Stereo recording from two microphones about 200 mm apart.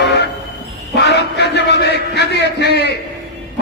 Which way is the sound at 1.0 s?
55° left (ahead or behind).